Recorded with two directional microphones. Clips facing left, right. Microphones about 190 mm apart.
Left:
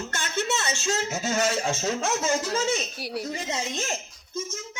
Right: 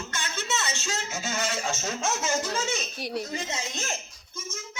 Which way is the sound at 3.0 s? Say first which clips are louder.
Even; 10° left (ahead or behind).